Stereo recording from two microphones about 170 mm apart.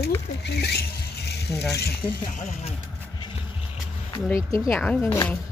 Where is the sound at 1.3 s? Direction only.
75° left (ahead or behind).